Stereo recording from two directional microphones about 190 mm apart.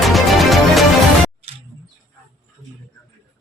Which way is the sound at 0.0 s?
Centre (ahead or behind).